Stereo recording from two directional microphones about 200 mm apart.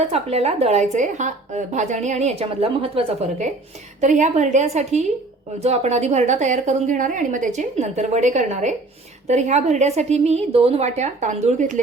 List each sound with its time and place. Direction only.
0.1 s a woman's voice: 30° right (ahead or behind)